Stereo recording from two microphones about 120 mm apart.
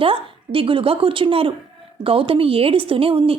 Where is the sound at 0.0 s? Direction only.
50° right (ahead or behind).